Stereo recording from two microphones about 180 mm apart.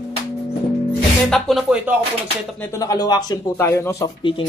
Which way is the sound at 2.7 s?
20° left (ahead or behind).